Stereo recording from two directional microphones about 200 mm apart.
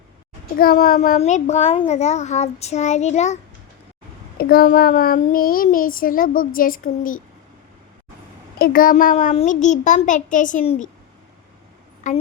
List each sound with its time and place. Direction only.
0.5 s a child's voice: 45° left (ahead or behind)
4.4 s a child's voice: 50° left (ahead or behind)
8.5 s a child's voice: 45° left (ahead or behind)
12.1 s a child's voice: 40° left (ahead or behind)